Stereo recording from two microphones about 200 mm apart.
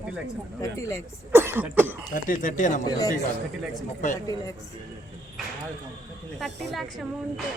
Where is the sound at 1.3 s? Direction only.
10° right (ahead or behind).